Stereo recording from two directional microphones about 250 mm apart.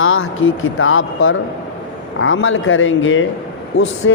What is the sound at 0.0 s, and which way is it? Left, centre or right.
Speech, left.